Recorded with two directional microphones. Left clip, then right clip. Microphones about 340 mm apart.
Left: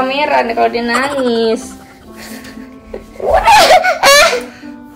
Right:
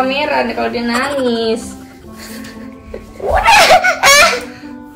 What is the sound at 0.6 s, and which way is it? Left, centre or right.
Speech, left.